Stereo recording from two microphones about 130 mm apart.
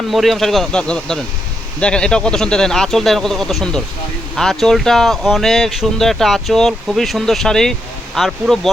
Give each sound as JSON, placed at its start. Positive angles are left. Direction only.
{"t": 0.1, "sound": "speech", "side_deg": 0}